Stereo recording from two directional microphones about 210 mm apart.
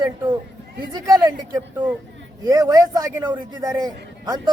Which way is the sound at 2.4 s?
15° right (ahead or behind).